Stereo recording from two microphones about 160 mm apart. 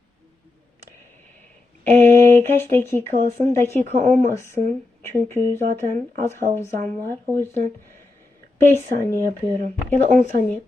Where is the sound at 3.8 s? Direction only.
50° right (ahead or behind).